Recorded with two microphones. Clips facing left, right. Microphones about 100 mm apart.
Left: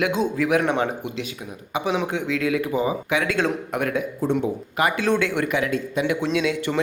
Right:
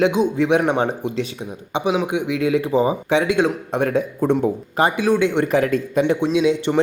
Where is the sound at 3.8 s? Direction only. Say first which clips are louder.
Right 6 dB; 35° right (ahead or behind).